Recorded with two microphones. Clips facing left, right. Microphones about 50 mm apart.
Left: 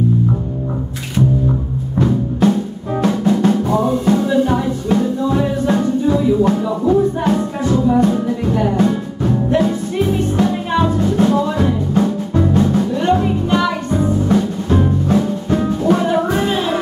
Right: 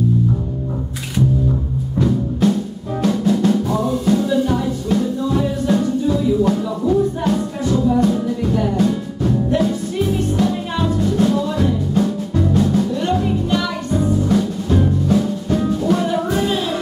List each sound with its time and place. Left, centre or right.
2.0 s music: centre